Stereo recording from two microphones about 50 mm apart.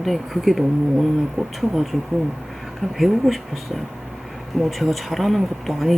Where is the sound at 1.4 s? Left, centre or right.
Right.